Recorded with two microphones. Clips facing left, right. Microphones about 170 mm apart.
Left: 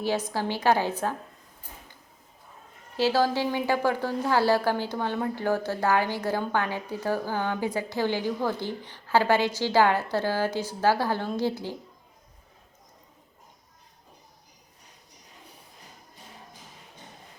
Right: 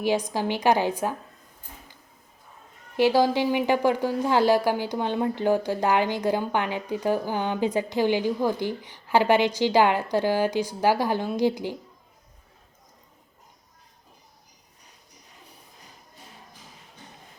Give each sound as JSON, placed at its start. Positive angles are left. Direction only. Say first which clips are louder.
{"t": 0.3, "sound": "a woman's voice", "louder": "right 2 dB", "side_deg": -15}
{"t": 3.0, "sound": "a woman's voice", "louder": "right 3 dB", "side_deg": -15}